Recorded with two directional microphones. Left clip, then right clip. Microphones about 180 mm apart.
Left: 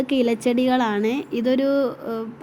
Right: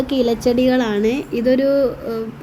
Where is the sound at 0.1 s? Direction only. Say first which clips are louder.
Right 4 dB; 15° left (ahead or behind).